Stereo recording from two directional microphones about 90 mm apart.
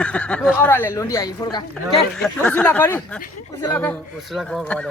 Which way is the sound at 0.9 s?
35° left (ahead or behind).